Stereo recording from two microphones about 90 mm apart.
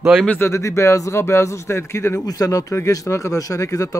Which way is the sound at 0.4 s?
35° left (ahead or behind).